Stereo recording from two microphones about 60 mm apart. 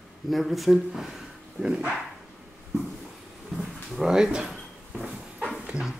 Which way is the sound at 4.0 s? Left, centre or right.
Centre.